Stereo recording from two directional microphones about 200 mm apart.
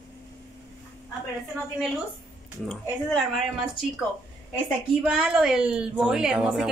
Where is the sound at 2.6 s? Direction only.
Centre (ahead or behind).